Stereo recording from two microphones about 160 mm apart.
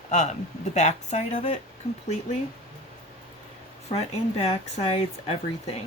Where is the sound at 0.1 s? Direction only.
45° left (ahead or behind).